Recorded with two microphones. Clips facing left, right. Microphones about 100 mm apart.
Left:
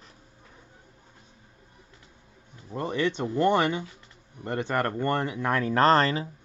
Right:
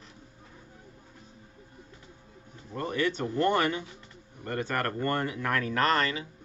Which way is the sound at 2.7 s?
20° left (ahead or behind).